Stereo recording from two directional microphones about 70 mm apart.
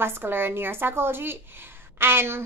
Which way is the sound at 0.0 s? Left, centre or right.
Right.